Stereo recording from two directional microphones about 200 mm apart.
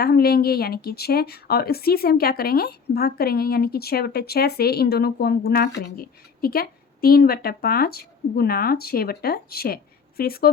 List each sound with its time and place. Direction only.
0.0 s a woman's voice: 50° left (ahead or behind)